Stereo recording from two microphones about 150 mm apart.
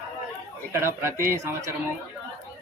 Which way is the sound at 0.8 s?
15° right (ahead or behind).